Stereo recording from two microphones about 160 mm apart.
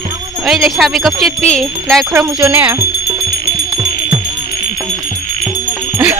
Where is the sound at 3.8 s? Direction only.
30° right (ahead or behind).